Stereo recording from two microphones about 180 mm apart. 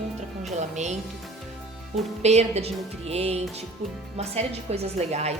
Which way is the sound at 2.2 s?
35° right (ahead or behind).